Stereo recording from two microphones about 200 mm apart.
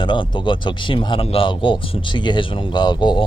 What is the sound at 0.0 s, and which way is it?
Speech, 25° left (ahead or behind).